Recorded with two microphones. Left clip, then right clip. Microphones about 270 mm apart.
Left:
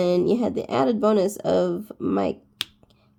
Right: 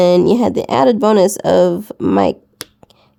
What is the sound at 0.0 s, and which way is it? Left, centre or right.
Speech, right.